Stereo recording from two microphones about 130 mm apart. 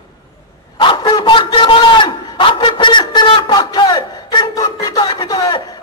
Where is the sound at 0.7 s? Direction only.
35° left (ahead or behind).